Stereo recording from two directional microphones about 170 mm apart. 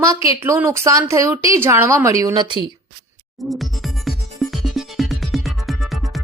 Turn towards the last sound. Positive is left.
turn(degrees=0)  # may be behind; listen again after turning